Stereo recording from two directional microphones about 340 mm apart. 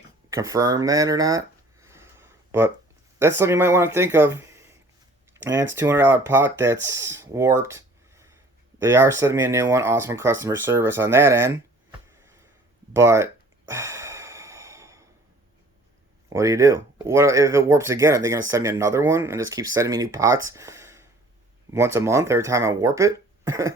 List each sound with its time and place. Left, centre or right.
0.3 s a sound: centre
3.2 s speech: centre
13.7 s sigh: centre
16.3 s speech: centre